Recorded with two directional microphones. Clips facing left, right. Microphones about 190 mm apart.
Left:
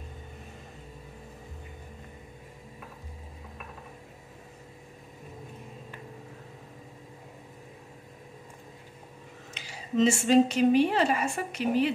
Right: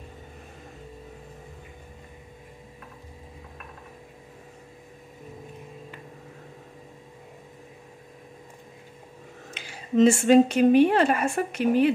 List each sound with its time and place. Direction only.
9.5 s speech: 55° right (ahead or behind)